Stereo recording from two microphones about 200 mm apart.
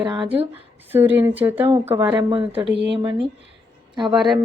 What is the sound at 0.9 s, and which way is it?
Speech, 10° right (ahead or behind).